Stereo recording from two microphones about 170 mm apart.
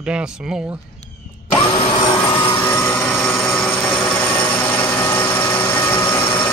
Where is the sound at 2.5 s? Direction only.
10° left (ahead or behind).